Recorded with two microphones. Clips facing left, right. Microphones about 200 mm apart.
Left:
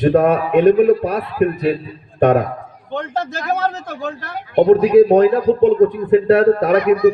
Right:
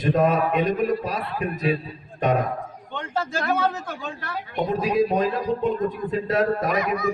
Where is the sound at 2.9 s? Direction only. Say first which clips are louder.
Left 6 dB; 40° left (ahead or behind).